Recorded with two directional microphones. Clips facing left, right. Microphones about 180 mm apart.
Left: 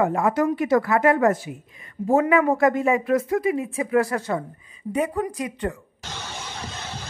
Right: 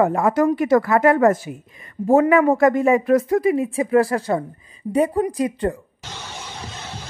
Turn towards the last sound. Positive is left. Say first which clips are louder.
# right 6 dB
turn(degrees=-35)  # may be behind; listen again after turning